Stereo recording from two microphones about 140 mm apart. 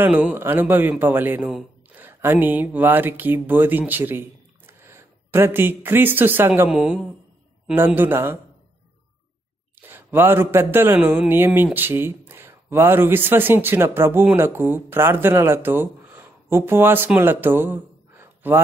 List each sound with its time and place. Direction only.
0.0 s a man's voice: 15° right (ahead or behind)
6.7 s a man's voice: 5° right (ahead or behind)
9.8 s speech: 15° right (ahead or behind)